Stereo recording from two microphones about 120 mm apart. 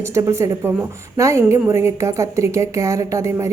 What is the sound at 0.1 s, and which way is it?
A woman's voice, 25° right (ahead or behind).